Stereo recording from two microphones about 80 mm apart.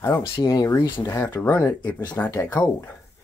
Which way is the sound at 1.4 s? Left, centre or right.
Left.